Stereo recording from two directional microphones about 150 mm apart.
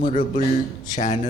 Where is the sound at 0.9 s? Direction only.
55° left (ahead or behind).